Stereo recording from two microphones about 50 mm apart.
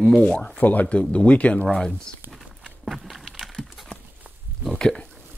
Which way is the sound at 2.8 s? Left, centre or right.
Centre.